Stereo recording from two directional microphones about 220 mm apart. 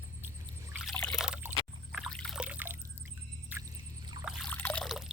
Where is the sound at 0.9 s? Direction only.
5° left (ahead or behind); by 4.2 s 15° right (ahead or behind).